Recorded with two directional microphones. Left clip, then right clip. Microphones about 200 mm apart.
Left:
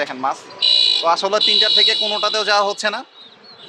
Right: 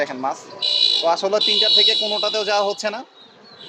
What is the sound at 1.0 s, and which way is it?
Speech, centre (ahead or behind).